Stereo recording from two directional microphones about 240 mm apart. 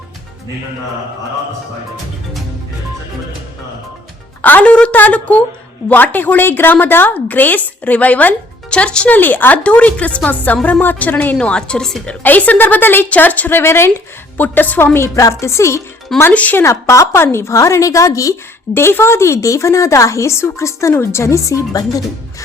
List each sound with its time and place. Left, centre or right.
4.4 s a woman's voice: centre